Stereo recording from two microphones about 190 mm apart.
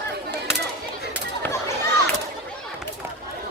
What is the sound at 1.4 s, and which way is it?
Children playing, 10° left (ahead or behind).